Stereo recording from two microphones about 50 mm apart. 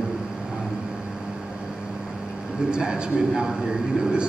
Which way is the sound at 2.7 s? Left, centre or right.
Centre.